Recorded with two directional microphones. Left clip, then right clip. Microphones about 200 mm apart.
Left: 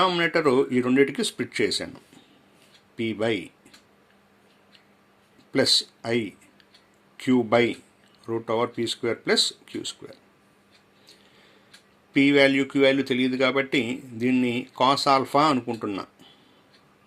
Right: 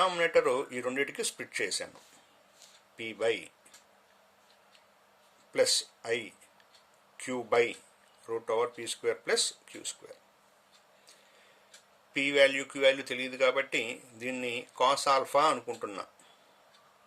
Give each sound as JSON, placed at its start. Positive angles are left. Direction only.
{"t": 0.0, "sound": "speech", "side_deg": 10}
{"t": 2.9, "sound": "speech", "side_deg": 15}
{"t": 5.5, "sound": "speech", "side_deg": 10}
{"t": 12.1, "sound": "speech", "side_deg": 15}